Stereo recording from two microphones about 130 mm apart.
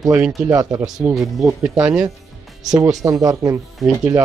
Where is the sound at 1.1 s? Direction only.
Centre (ahead or behind).